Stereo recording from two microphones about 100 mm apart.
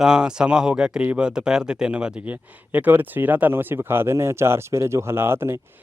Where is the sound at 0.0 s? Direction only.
5° right (ahead or behind).